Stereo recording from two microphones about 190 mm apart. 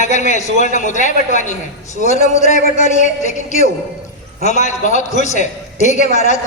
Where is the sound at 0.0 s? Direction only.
40° left (ahead or behind).